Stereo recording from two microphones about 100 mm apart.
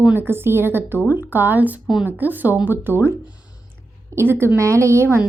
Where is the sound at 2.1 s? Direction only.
20° right (ahead or behind).